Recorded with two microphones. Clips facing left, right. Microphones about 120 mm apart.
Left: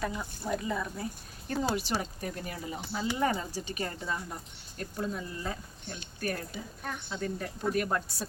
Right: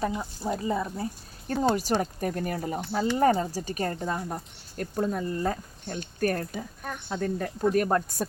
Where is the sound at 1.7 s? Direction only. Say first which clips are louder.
Right 6 dB; 45° right (ahead or behind).